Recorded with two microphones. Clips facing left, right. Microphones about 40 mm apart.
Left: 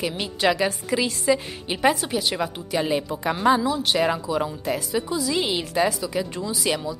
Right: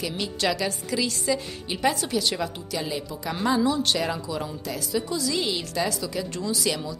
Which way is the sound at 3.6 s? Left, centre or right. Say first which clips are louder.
Even; centre.